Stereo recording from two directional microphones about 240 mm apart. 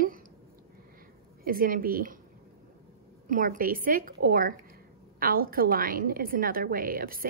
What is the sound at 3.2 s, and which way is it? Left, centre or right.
A woman's voice, right.